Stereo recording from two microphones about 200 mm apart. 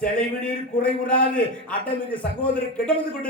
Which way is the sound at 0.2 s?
5° left (ahead or behind).